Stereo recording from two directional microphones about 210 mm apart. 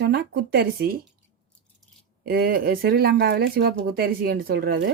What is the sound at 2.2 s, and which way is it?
A woman's voice, 45° right (ahead or behind).